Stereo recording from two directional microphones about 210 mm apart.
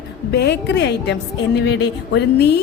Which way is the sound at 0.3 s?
50° left (ahead or behind).